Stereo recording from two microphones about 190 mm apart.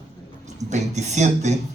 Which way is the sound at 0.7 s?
35° right (ahead or behind).